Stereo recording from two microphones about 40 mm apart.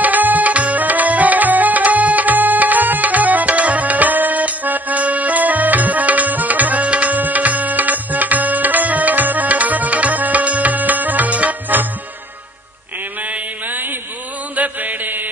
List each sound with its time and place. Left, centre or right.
0.0 s music: right
13.7 s a sound: right
14.5 s chant: right